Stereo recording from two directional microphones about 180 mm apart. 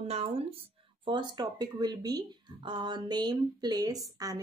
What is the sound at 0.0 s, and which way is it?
A woman's voice, 35° right (ahead or behind).